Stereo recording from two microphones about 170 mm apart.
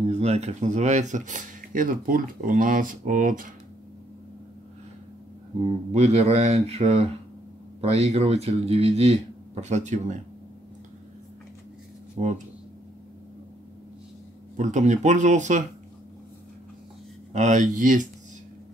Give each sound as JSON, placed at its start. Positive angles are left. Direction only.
{"t": 0.0, "sound": "speech", "side_deg": -40}
{"t": 5.6, "sound": "speech", "side_deg": -35}
{"t": 12.2, "sound": "speech", "side_deg": -40}
{"t": 14.6, "sound": "speech", "side_deg": -45}
{"t": 17.3, "sound": "speech", "side_deg": -45}